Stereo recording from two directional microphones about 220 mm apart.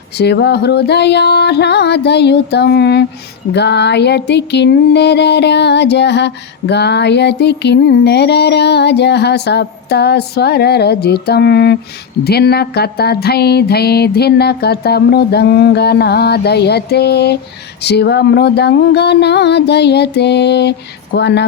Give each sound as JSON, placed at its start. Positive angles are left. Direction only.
{"t": 0.2, "sound": "music", "side_deg": 50}